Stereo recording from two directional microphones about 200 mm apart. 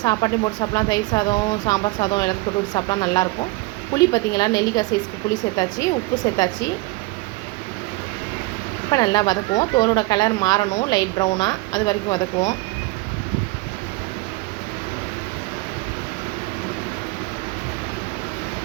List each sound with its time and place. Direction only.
0.0 s speech: 20° left (ahead or behind)
8.9 s speech: 20° left (ahead or behind)